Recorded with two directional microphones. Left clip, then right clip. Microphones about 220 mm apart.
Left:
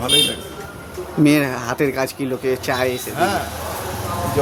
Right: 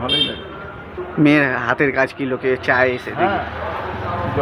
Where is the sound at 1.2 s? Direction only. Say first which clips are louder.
Right 2 dB; 15° left (ahead or behind).